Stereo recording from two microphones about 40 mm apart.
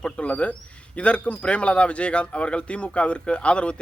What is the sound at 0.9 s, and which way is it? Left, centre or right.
A man's voice, left.